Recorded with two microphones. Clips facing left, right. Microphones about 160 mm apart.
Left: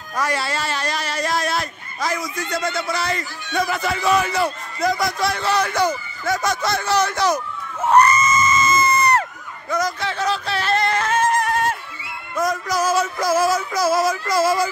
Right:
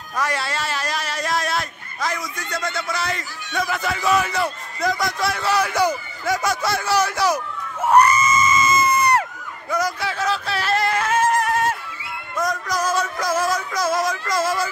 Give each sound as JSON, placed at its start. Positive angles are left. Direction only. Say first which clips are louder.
{"t": 0.2, "sound": "speech", "louder": "left 1 dB", "side_deg": 0}
{"t": 7.8, "sound": "crowd", "louder": "even", "side_deg": -10}
{"t": 9.7, "sound": "a sound", "louder": "left 1 dB", "side_deg": -10}
{"t": 12.4, "sound": "speech", "louder": "left 2 dB", "side_deg": 5}